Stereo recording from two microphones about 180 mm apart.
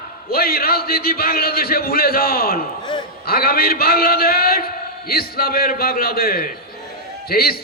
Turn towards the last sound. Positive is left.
turn(degrees=55)  # may be behind; listen again after turning